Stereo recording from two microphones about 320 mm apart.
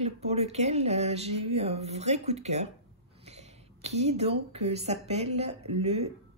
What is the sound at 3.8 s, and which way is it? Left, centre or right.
A woman's voice, centre.